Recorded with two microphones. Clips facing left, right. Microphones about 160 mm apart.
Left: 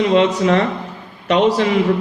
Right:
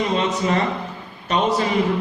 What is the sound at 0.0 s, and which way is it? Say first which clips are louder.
A man's voice: left 7 dB; 90° left.